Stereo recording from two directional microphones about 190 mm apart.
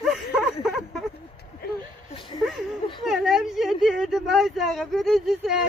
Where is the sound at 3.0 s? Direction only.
Centre (ahead or behind).